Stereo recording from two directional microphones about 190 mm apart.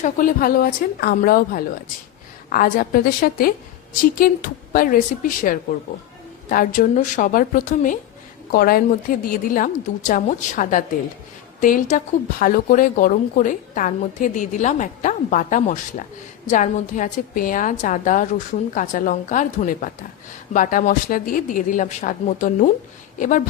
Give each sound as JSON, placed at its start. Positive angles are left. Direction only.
{"t": 0.0, "sound": "speech", "side_deg": 45}